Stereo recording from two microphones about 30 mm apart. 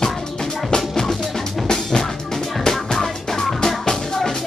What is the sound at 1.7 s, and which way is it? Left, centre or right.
Drum, centre.